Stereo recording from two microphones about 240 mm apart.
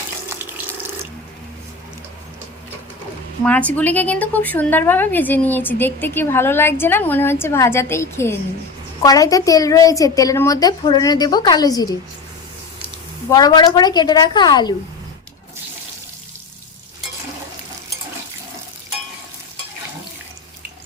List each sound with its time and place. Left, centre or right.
3.4 s a woman's voice: centre
13.3 s a woman's voice: centre